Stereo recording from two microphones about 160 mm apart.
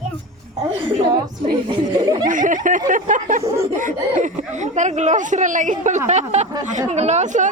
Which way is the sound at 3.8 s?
55° right (ahead or behind).